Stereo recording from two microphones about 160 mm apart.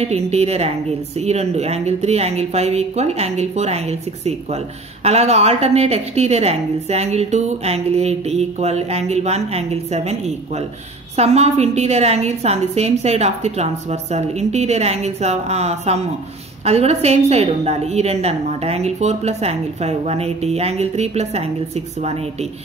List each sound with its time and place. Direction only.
0.0 s a woman's voice: 40° right (ahead or behind)